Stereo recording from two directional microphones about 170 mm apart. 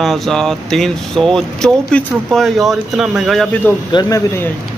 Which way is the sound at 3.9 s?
25° left (ahead or behind).